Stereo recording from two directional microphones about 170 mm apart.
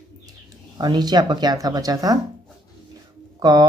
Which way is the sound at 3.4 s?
25° right (ahead or behind).